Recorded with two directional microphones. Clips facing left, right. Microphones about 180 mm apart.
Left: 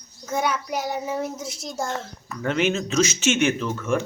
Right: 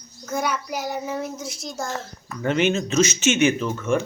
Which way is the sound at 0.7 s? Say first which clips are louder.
Left 1 dB; 25° left (ahead or behind).